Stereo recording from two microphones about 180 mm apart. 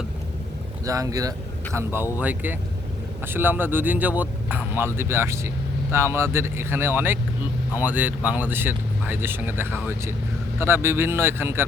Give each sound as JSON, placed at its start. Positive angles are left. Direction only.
{"t": 0.9, "sound": "speech", "side_deg": -20}